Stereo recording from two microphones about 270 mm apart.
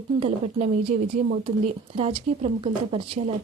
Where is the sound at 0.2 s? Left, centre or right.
Right.